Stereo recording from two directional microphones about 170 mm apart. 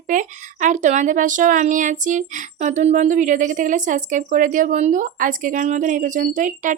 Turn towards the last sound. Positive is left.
turn(degrees=-50)  # may be behind; listen again after turning